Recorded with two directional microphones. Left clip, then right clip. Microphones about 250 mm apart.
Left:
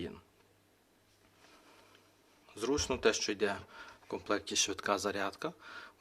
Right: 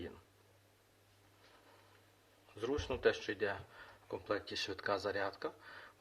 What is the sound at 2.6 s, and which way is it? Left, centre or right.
Speech, left.